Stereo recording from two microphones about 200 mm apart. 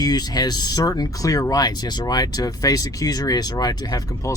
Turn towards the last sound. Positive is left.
turn(degrees=15)  # may be behind; listen again after turning